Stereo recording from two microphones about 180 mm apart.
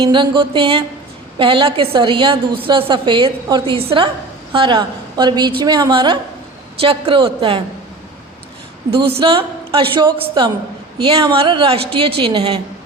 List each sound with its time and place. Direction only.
0.0 s a woman's voice: 25° right (ahead or behind)
9.1 s a woman's voice: 30° right (ahead or behind)